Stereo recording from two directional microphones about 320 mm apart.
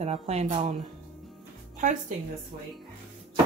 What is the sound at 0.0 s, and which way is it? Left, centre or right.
Speech, centre.